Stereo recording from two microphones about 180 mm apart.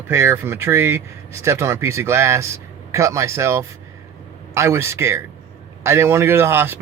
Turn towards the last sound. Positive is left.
turn(degrees=-10)  # may be behind; listen again after turning